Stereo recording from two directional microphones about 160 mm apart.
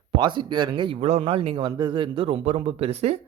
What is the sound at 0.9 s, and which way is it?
A man's voice, 40° right (ahead or behind).